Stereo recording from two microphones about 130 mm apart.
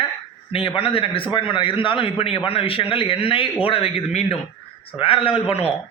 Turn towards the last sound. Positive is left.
turn(degrees=50)  # may be behind; listen again after turning